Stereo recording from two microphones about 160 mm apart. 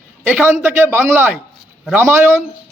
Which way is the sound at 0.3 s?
10° right (ahead or behind).